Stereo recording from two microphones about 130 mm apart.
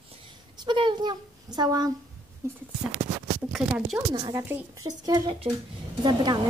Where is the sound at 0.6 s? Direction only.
40° right (ahead or behind); by 2.6 s 20° right (ahead or behind).